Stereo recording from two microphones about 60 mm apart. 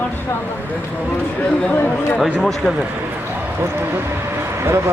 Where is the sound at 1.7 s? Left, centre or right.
Left.